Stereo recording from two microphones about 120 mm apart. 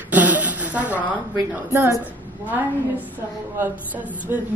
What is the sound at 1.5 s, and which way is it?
Music, 20° right (ahead or behind).